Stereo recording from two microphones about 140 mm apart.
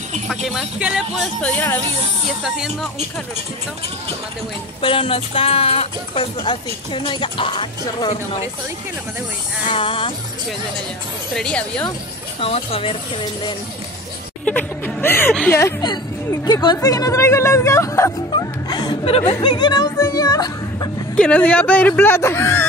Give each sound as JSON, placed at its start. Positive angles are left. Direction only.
{"t": 0.5, "sound": "speech", "side_deg": -5}
{"t": 1.4, "sound": "speech", "side_deg": 10}
{"t": 2.4, "sound": "speech", "side_deg": -5}
{"t": 4.8, "sound": "speech", "side_deg": 40}
{"t": 6.4, "sound": "speech", "side_deg": 35}
{"t": 9.7, "sound": "speech", "side_deg": 40}
{"t": 11.3, "sound": "speech", "side_deg": 5}
{"t": 12.4, "sound": "speech", "side_deg": 45}
{"t": 14.4, "sound": "speech", "side_deg": 15}
{"t": 15.5, "sound": "speech", "side_deg": 25}
{"t": 18.3, "sound": "music", "side_deg": 30}
{"t": 19.0, "sound": "speech", "side_deg": 45}
{"t": 19.4, "sound": "speech", "side_deg": 30}
{"t": 21.2, "sound": "speech", "side_deg": 10}